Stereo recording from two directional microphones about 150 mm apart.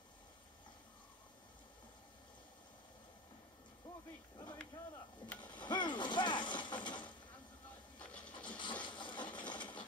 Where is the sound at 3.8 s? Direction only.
30° left (ahead or behind).